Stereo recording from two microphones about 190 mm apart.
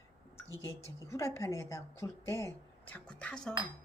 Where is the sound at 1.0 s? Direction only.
15° left (ahead or behind).